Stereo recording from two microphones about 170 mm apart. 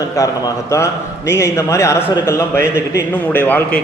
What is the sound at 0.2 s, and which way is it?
A man's voice, 20° left (ahead or behind).